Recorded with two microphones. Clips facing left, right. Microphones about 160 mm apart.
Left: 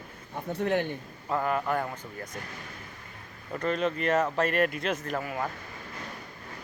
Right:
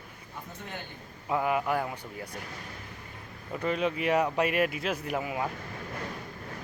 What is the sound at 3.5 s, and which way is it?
Speech, 10° right (ahead or behind).